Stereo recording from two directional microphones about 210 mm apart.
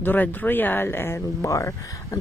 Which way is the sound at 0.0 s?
10° left (ahead or behind).